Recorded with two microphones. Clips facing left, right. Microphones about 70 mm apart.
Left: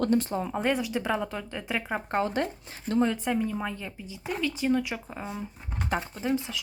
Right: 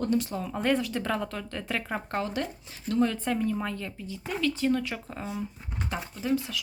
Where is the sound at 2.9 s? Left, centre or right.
Left.